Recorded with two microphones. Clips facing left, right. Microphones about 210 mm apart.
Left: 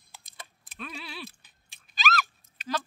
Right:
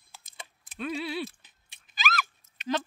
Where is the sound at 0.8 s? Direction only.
25° right (ahead or behind).